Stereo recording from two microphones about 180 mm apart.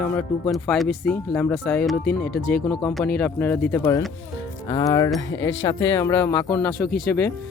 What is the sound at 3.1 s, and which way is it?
Speech, 10° left (ahead or behind).